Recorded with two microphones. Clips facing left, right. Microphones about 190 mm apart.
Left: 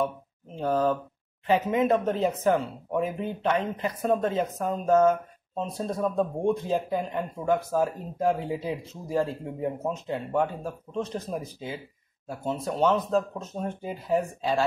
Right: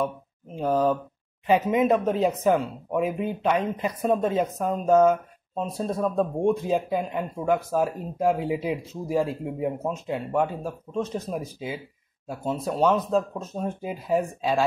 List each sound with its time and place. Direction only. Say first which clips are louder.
0.6 s speech: right 2 dB; 10° right (ahead or behind)